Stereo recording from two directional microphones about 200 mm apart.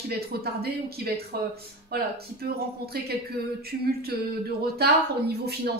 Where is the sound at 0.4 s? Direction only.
50° right (ahead or behind).